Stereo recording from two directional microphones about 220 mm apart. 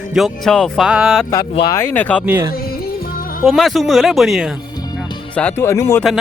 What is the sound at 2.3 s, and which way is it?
Speech, 10° right (ahead or behind).